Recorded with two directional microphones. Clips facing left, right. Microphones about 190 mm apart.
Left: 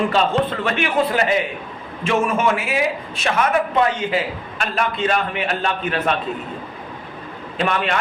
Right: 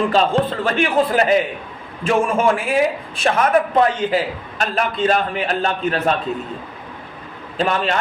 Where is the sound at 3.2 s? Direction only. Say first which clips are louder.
Right 3 dB; 40° right (ahead or behind).